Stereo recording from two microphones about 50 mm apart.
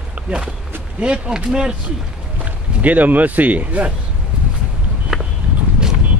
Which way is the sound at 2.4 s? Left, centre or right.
Right.